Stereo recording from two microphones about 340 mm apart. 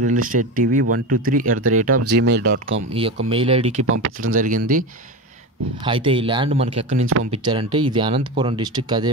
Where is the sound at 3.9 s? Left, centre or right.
Right.